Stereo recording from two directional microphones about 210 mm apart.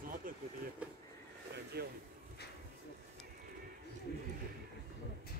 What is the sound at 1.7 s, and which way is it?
Speech, 50° right (ahead or behind).